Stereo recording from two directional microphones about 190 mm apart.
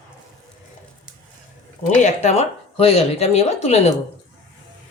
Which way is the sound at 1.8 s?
40° left (ahead or behind).